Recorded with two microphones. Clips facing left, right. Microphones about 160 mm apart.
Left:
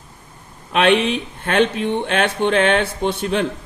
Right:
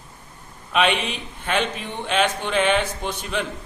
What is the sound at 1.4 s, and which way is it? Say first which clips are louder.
Speech: left 7 dB; 60° left (ahead or behind).